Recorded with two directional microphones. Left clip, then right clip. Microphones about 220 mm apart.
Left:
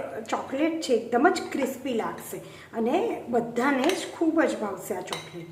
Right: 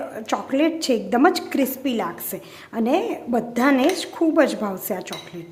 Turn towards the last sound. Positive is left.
turn(degrees=-45)  # may be behind; listen again after turning